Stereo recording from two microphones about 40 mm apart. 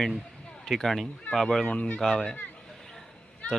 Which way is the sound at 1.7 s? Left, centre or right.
Left.